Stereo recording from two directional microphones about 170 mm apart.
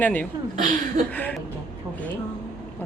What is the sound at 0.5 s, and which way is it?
Speech, 55° right (ahead or behind).